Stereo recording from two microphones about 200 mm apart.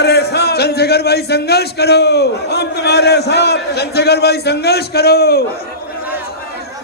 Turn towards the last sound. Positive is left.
turn(degrees=50)  # may be behind; listen again after turning